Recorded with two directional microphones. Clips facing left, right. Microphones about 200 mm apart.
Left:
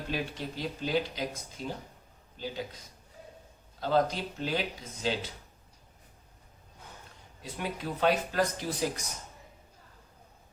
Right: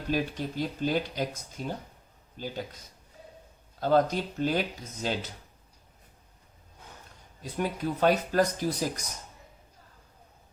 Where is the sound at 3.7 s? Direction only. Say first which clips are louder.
Right 3 dB; 45° right (ahead or behind).